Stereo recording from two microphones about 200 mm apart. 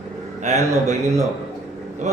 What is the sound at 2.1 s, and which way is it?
Speech, 35° right (ahead or behind).